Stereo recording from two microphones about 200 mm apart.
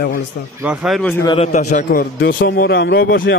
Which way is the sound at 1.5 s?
40° left (ahead or behind).